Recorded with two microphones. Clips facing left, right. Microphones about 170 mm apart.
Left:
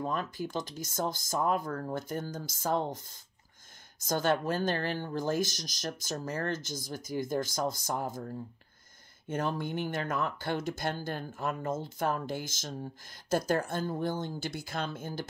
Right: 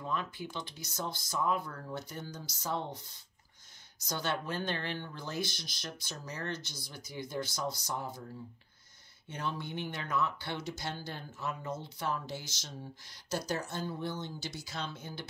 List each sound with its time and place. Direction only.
0.0 s speech: 45° left (ahead or behind)